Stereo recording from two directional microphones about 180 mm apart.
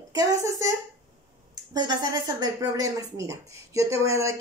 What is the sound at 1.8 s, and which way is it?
Speech, 25° right (ahead or behind).